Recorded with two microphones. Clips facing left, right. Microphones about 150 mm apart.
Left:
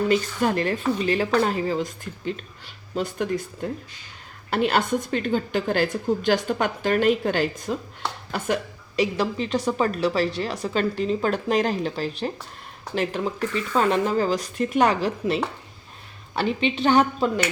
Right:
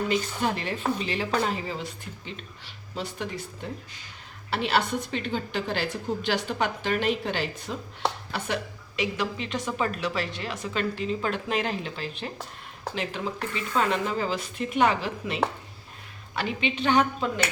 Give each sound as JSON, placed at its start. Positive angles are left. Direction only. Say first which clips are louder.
{"t": 0.1, "sound": "a woman's voice", "louder": "left 5 dB", "side_deg": 50}